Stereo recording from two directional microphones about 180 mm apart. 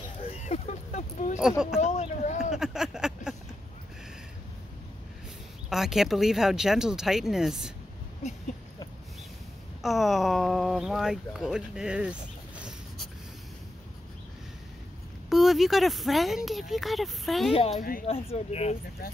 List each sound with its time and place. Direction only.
0.3 s a sound: 35° left (ahead or behind)
2.5 s a sound: 5° right (ahead or behind)
5.7 s speech: centre (ahead or behind)
9.8 s speech: centre (ahead or behind)
15.2 s speech: centre (ahead or behind)
17.5 s speech: 35° left (ahead or behind)